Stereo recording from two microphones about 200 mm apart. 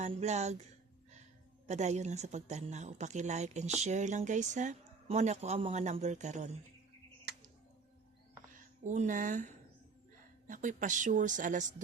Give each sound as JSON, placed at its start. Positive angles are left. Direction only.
{"t": 0.0, "sound": "speech", "side_deg": -35}
{"t": 1.6, "sound": "speech", "side_deg": -35}
{"t": 8.8, "sound": "speech", "side_deg": -35}